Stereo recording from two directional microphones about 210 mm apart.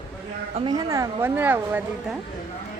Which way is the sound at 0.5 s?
20° right (ahead or behind).